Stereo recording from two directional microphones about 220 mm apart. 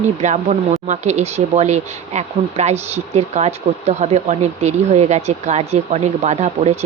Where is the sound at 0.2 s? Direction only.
30° right (ahead or behind).